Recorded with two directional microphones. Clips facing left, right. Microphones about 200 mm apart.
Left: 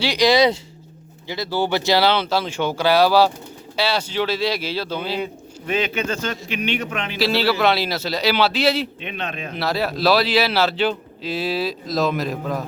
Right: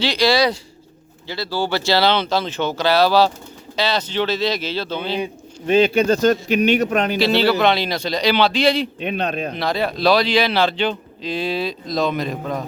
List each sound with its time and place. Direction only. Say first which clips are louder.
0.0 s speech: left 1 dB; 15° left (ahead or behind)
5.6 s a man's voice: right 8 dB; 30° right (ahead or behind)
7.2 s a man's voice: right 1 dB; centre (ahead or behind)
9.0 s a man's voice: right 7 dB; 40° right (ahead or behind)
9.6 s a man's voice: left 2 dB; 5° left (ahead or behind)